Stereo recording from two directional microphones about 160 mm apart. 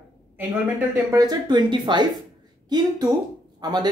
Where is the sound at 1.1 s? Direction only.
25° right (ahead or behind).